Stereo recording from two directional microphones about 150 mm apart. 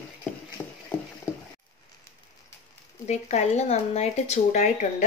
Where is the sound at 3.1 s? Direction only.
50° left (ahead or behind).